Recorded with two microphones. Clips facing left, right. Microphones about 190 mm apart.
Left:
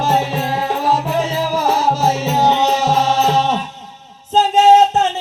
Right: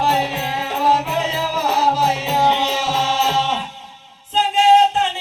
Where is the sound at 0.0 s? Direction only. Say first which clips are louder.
Left 2 dB; 45° left (ahead or behind).